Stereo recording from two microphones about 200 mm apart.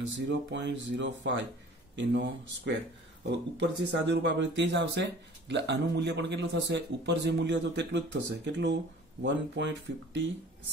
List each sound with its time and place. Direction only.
0.3 s a man's voice: 65° right (ahead or behind)